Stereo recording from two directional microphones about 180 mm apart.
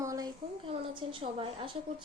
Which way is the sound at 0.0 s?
20° right (ahead or behind).